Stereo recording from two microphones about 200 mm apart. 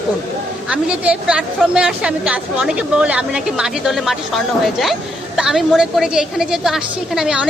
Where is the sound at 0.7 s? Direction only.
5° right (ahead or behind).